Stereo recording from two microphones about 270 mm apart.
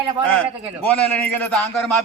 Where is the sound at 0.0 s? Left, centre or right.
Centre.